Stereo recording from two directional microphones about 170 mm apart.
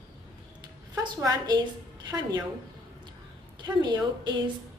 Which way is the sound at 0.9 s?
20° right (ahead or behind).